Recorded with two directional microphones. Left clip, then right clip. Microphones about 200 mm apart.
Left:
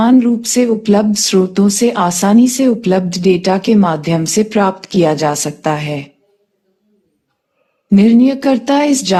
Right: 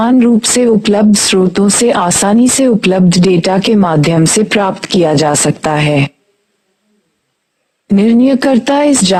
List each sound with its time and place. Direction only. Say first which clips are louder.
0.0 s speech: right 2 dB; 50° right (ahead or behind)
7.9 s speech: right 1 dB; 50° right (ahead or behind)